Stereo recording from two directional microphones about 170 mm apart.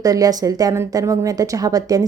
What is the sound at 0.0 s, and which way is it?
A woman's voice, 20° right (ahead or behind).